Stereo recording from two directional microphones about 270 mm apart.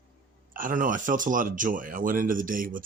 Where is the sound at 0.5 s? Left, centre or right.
Right.